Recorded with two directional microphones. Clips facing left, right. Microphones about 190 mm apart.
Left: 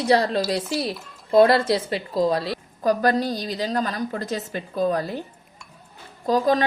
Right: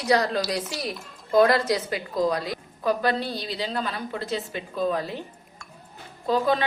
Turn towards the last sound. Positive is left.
turn(degrees=40)  # may be behind; listen again after turning